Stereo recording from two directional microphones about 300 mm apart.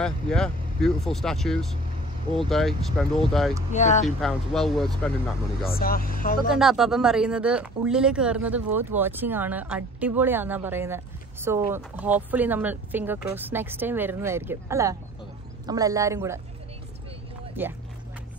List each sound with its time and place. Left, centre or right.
0.0 s speech: centre
3.7 s speech: left
4.2 s speech: centre
5.7 s speech: left
6.5 s speech: centre
17.6 s speech: centre